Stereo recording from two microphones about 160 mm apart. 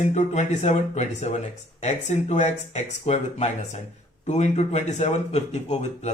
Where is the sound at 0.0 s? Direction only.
45° left (ahead or behind).